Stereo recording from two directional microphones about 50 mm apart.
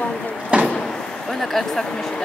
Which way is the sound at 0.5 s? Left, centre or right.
Right.